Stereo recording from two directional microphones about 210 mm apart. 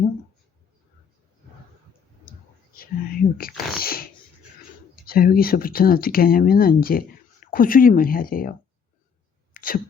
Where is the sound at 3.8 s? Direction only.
45° left (ahead or behind).